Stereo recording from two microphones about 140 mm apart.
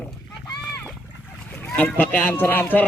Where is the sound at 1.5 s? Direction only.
10° left (ahead or behind).